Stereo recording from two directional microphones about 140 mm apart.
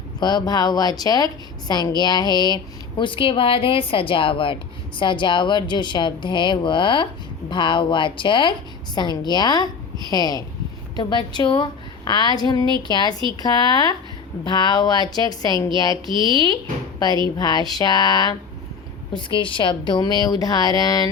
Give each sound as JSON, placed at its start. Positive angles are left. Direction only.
{"t": 0.2, "sound": "a woman's voice", "side_deg": 30}
{"t": 16.0, "sound": "speech", "side_deg": -35}
{"t": 17.3, "sound": "a woman's voice", "side_deg": 30}